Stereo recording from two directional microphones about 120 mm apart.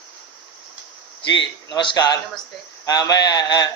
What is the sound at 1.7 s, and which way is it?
A man's voice, 35° left (ahead or behind).